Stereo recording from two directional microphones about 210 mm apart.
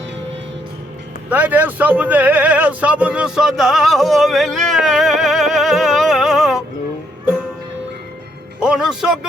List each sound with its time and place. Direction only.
1.3 s speech: 10° right (ahead or behind)
8.6 s speech: 5° right (ahead or behind)